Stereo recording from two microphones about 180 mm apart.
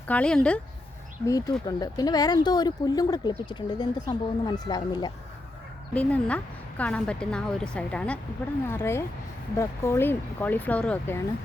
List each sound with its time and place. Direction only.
0.1 s a woman's voice: 5° left (ahead or behind)
1.3 s speech: 20° left (ahead or behind)
5.9 s a woman's voice: 5° left (ahead or behind)